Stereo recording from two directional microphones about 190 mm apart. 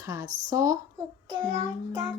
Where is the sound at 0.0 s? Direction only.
15° right (ahead or behind).